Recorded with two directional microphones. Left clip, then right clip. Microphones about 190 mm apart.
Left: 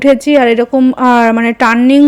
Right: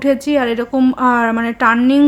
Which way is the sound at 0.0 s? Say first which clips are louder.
Left 7 dB; 30° left (ahead or behind).